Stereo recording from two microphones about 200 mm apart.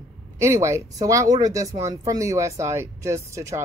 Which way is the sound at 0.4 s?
15° right (ahead or behind).